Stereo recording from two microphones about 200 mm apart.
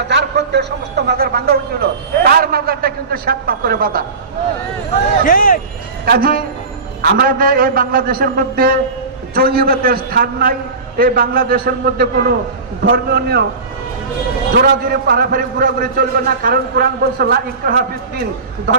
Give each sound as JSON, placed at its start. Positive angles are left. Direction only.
{"t": 0.1, "sound": "a man's voice", "side_deg": -60}
{"t": 5.2, "sound": "speech", "side_deg": 45}
{"t": 6.1, "sound": "a man's voice", "side_deg": -45}
{"t": 14.6, "sound": "a man's voice", "side_deg": -50}